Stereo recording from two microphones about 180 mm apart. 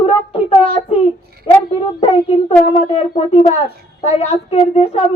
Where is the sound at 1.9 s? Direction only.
35° left (ahead or behind).